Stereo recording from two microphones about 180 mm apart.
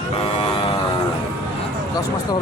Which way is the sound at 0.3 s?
30° left (ahead or behind).